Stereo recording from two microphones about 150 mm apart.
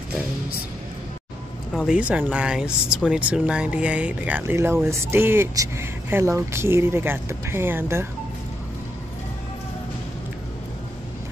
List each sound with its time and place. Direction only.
1.9 s speech: 10° right (ahead or behind)